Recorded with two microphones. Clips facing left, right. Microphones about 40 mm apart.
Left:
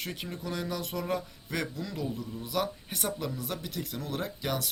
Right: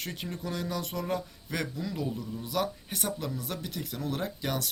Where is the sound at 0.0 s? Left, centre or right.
Centre.